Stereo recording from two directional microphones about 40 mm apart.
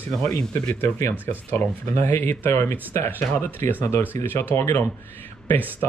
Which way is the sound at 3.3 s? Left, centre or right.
Left.